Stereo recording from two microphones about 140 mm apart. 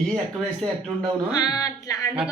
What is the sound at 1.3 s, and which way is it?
Speech, 25° left (ahead or behind).